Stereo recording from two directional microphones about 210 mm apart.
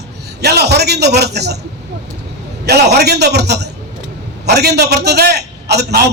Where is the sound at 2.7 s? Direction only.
50° right (ahead or behind).